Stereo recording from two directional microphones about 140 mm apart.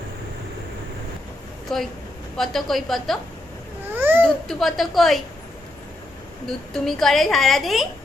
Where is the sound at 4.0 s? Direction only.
15° right (ahead or behind).